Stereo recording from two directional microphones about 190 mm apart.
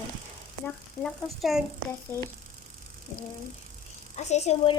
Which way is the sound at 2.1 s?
10° left (ahead or behind).